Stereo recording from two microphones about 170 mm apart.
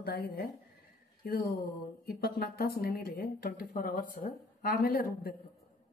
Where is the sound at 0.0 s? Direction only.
60° left (ahead or behind).